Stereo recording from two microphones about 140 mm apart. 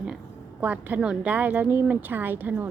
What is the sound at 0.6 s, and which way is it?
Speech, 10° right (ahead or behind).